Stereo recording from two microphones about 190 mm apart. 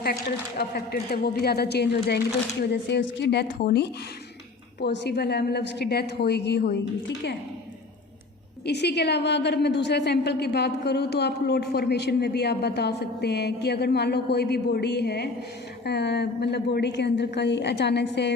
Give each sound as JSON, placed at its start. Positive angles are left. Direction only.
{"t": 0.0, "sound": "a woman's voice", "side_deg": 55}
{"t": 8.6, "sound": "a woman's voice", "side_deg": 60}